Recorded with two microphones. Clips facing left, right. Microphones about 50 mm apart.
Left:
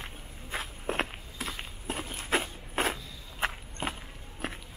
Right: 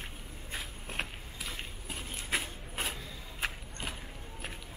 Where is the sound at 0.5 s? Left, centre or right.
Left.